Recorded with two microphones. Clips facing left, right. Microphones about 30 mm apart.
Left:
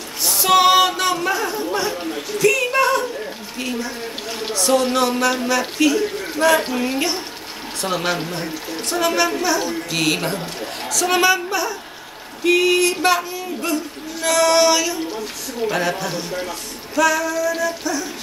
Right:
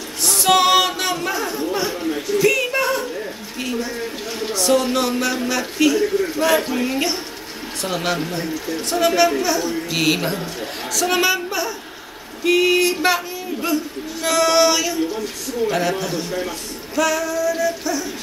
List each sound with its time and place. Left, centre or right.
0.2 s a sound: centre
2.0 s speech: centre
2.7 s speech: centre
8.3 s a man's voice: left
8.9 s speech: centre